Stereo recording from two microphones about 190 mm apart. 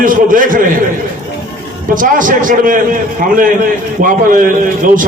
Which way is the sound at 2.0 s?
45° right (ahead or behind).